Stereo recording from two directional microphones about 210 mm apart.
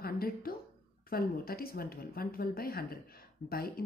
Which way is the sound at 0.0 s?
45° left (ahead or behind).